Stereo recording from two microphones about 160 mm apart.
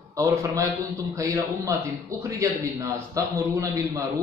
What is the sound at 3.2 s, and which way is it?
Speech, 20° right (ahead or behind).